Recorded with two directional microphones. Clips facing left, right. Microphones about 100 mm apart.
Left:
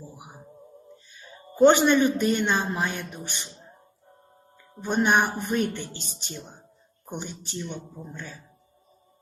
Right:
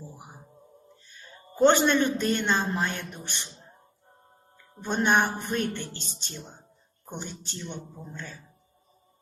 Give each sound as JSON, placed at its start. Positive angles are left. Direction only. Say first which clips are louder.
{"t": 1.1, "sound": "a man's voice", "louder": "left 1 dB", "side_deg": 15}
{"t": 5.0, "sound": "a man's voice", "louder": "even", "side_deg": 15}